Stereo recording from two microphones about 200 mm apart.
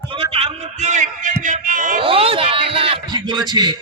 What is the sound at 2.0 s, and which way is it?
Speech, 30° right (ahead or behind).